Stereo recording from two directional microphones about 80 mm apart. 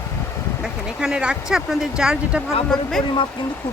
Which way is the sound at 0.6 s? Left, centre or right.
Centre.